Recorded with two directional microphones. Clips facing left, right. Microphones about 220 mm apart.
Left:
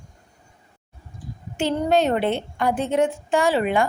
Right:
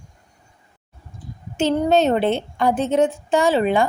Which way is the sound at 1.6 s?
20° right (ahead or behind).